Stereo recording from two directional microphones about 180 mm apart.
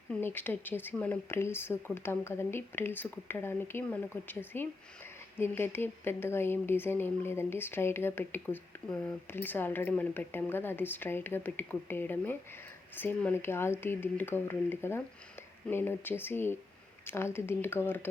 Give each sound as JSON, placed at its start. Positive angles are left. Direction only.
{"t": 0.1, "sound": "speech", "side_deg": 10}